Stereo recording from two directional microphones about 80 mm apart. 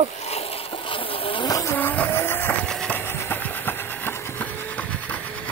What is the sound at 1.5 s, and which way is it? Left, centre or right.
Vehicle, left.